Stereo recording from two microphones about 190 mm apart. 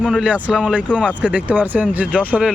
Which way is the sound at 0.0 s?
5° right (ahead or behind).